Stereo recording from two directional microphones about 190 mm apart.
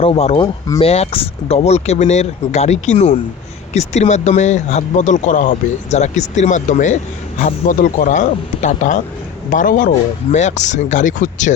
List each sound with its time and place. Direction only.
0.0 s speech: 30° left (ahead or behind)
0.9 s speech: 35° left (ahead or behind)